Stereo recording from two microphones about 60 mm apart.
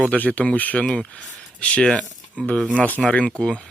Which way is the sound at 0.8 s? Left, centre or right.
Centre.